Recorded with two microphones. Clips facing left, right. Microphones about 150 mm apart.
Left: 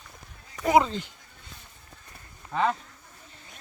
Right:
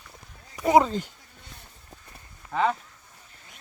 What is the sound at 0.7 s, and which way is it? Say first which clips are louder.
Speech: right 2 dB; 40° right (ahead or behind).